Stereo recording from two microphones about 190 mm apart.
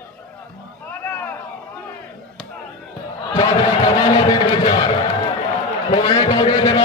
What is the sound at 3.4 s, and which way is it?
Crowd, 20° left (ahead or behind).